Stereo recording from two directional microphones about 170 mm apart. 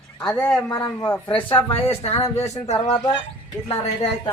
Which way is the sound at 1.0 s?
15° left (ahead or behind).